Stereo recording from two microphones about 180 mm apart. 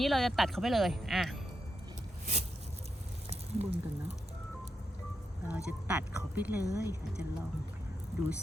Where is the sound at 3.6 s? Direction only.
35° right (ahead or behind).